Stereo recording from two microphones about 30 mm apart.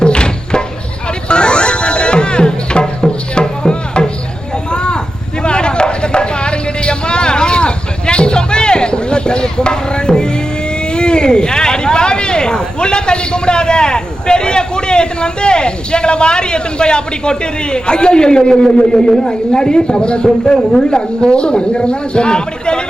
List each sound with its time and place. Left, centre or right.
0.0 s a sound: left
1.3 s music: left
4.7 s a sound: left
18.8 s a man's voice: left
20.2 s speech: centre
21.3 s speech: left